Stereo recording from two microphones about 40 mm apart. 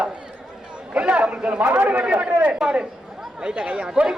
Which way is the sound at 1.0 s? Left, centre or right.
Right.